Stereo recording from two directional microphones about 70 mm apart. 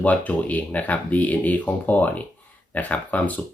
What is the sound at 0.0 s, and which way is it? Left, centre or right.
Speech, left.